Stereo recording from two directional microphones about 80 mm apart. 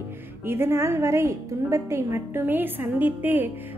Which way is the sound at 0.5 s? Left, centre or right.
Right.